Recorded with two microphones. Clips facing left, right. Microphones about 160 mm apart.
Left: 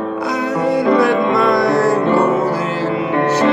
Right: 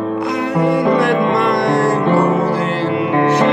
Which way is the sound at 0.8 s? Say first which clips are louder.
Left 1 dB; 15° right (ahead or behind).